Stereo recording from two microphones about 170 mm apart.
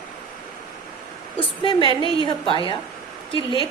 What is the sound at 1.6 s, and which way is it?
A woman's voice, 30° left (ahead or behind).